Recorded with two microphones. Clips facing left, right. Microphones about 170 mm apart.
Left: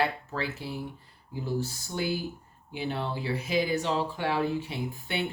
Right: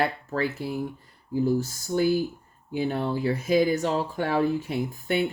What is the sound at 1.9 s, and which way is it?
Speech, 45° right (ahead or behind).